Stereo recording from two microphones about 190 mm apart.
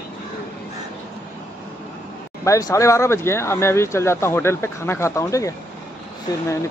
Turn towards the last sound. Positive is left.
turn(degrees=20)  # may be behind; listen again after turning